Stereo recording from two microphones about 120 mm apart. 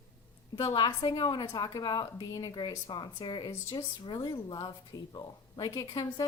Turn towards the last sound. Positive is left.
turn(degrees=30)  # may be behind; listen again after turning